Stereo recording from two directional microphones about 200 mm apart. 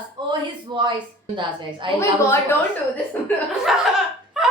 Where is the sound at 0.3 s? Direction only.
25° right (ahead or behind).